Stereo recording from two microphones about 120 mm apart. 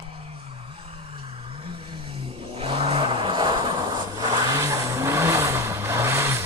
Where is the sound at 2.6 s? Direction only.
55° right (ahead or behind).